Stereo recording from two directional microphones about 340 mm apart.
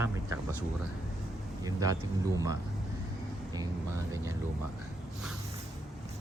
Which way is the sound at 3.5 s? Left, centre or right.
Centre.